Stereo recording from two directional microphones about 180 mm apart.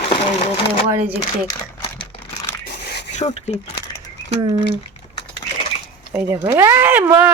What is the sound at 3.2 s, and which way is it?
Speech, 40° left (ahead or behind).